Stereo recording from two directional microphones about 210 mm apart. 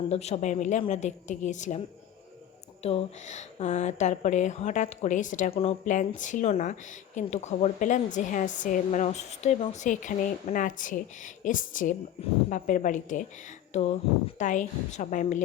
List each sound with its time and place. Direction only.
0.1 s speech: 30° left (ahead or behind)
2.8 s speech: 30° left (ahead or behind)